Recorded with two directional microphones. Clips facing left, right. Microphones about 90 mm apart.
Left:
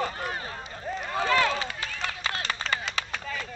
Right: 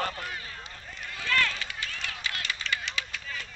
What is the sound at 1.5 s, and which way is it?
Chop, 35° left (ahead or behind).